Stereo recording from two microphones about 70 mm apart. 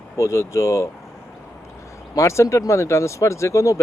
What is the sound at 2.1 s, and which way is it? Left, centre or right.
Speech, left.